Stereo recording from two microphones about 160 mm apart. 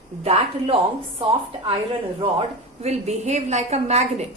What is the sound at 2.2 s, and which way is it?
A woman's voice, 35° right (ahead or behind).